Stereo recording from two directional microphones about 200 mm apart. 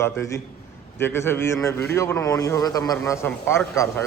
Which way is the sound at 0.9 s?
10° left (ahead or behind).